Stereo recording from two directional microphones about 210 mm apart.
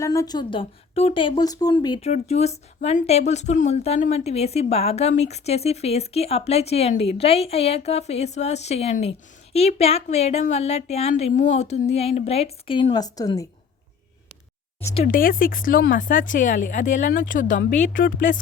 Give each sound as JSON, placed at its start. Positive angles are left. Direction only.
{"t": 0.0, "sound": "speech", "side_deg": 15}
{"t": 15.0, "sound": "speech", "side_deg": 45}